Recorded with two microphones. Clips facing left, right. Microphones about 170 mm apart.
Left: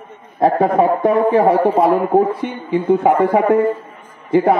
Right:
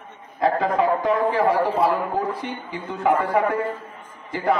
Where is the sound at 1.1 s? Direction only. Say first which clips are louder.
Left 7 dB; 55° left (ahead or behind).